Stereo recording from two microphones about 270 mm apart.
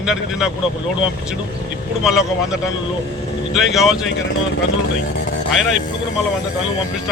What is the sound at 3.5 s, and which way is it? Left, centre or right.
Speech, centre.